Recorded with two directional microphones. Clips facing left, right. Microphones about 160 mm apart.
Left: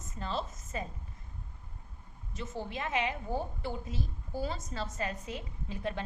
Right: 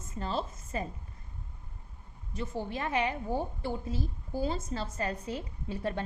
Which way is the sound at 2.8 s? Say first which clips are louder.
Right 2 dB; 35° right (ahead or behind).